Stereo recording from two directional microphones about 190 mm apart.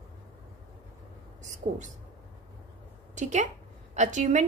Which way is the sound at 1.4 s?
40° right (ahead or behind).